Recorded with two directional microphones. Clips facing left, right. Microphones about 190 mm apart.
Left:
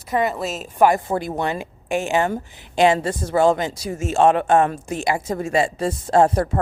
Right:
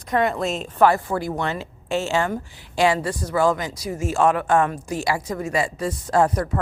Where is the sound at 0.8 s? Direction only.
15° left (ahead or behind).